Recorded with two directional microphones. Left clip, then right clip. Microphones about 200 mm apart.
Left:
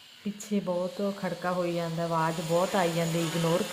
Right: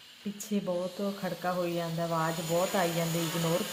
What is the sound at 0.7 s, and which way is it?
Speech, 15° left (ahead or behind).